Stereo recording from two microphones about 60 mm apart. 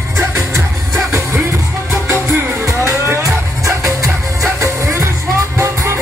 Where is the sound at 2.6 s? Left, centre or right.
Right.